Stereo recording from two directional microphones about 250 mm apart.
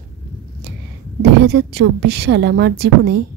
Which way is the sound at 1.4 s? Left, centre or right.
Right.